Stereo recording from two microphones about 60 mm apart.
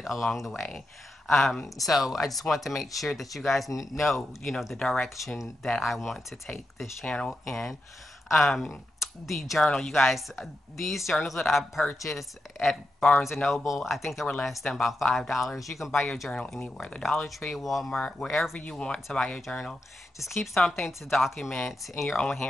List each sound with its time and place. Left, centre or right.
0.0 s speech: centre
7.1 s speech: centre